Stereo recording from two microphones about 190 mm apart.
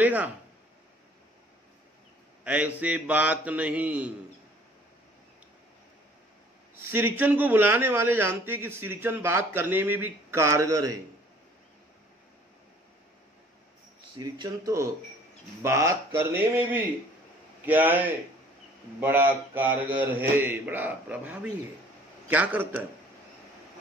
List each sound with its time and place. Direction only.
0.0 s speech: 10° right (ahead or behind)
2.4 s a man's voice: 10° right (ahead or behind)
6.9 s a man's voice: 10° right (ahead or behind)
14.1 s a man's voice: 20° right (ahead or behind)